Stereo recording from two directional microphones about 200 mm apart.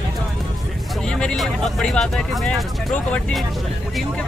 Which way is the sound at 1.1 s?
5° left (ahead or behind).